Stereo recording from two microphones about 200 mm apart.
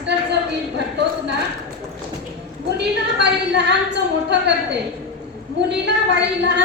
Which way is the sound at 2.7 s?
55° right (ahead or behind).